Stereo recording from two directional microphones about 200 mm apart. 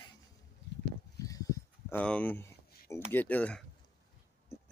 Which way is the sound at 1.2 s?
15° left (ahead or behind).